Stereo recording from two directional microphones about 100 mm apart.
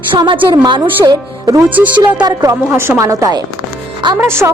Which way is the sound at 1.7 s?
15° right (ahead or behind).